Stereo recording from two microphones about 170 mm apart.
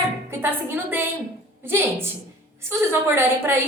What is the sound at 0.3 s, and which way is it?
A woman's voice, 10° right (ahead or behind).